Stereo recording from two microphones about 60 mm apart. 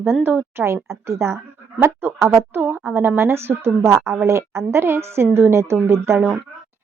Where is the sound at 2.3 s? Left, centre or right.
Right.